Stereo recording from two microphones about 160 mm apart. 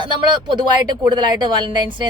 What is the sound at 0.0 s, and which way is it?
Speech, 30° right (ahead or behind).